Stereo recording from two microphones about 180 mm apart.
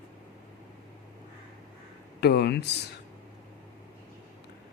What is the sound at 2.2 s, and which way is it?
Speech, 65° left (ahead or behind).